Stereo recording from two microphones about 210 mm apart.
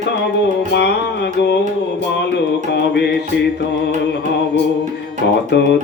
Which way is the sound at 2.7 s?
50° left (ahead or behind).